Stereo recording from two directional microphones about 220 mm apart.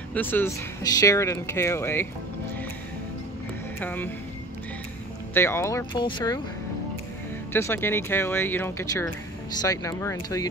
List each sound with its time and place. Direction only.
0.1 s speech: 10° left (ahead or behind)
3.8 s speech: 10° left (ahead or behind)
5.3 s speech: 10° left (ahead or behind)
7.5 s speech: 10° left (ahead or behind)